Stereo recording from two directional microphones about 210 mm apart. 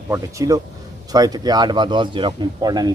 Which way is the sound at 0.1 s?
15° right (ahead or behind).